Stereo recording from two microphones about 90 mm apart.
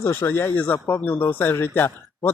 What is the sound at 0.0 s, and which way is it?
Speech, 25° left (ahead or behind).